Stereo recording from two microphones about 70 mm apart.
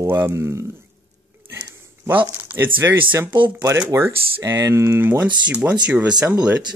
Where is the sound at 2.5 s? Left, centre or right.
Right.